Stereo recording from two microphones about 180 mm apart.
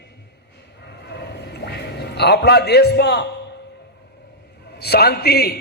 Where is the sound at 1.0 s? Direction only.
65° left (ahead or behind).